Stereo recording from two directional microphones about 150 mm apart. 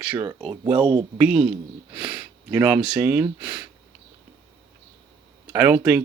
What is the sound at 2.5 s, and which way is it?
Speech, 10° right (ahead or behind).